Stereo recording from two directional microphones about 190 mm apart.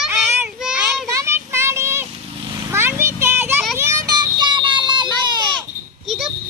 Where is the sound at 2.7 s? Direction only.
15° right (ahead or behind).